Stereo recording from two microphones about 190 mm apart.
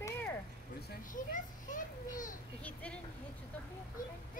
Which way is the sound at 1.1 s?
45° left (ahead or behind).